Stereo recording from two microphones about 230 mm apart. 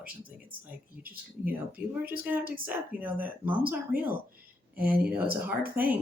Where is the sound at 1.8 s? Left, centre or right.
Centre.